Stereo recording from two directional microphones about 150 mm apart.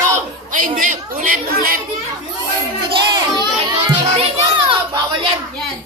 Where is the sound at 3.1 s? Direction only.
25° right (ahead or behind).